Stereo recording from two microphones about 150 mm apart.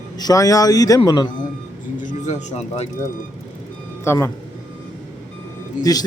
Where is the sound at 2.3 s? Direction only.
50° left (ahead or behind).